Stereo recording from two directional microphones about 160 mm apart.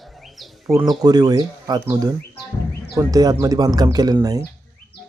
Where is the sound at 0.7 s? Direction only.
25° right (ahead or behind).